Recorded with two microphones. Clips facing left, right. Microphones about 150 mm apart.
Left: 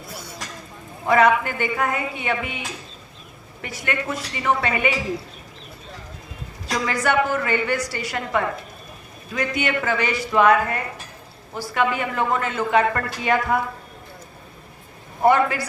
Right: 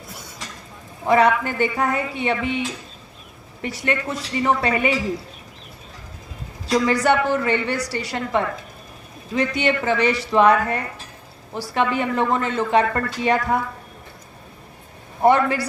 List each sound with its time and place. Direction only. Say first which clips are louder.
1.0 s speech: even; 30° right (ahead or behind)
6.8 s speech: right 1 dB; 30° right (ahead or behind)
15.2 s speech: right 1 dB; 30° right (ahead or behind)